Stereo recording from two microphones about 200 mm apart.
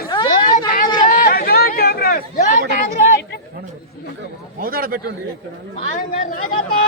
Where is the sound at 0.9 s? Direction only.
45° left (ahead or behind).